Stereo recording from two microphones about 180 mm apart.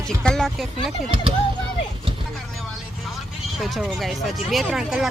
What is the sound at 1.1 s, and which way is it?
Speech, 30° right (ahead or behind).